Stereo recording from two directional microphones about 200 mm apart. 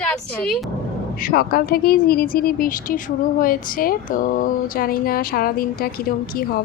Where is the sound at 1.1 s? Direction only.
45° left (ahead or behind).